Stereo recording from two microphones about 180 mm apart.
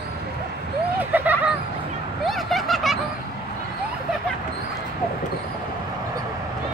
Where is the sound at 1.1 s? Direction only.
10° right (ahead or behind).